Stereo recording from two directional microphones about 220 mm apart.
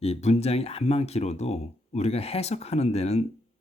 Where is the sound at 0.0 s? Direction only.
30° left (ahead or behind).